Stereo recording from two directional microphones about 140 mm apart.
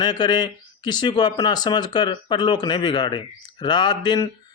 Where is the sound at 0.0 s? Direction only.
30° left (ahead or behind).